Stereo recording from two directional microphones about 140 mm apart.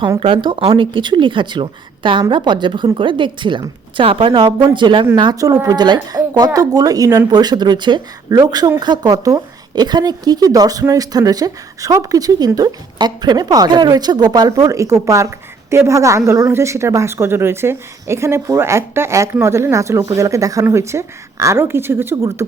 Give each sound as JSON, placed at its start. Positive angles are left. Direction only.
{"t": 0.2, "sound": "a woman's voice", "side_deg": -40}